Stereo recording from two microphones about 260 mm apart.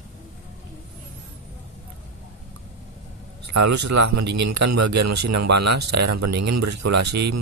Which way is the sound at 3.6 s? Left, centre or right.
Right.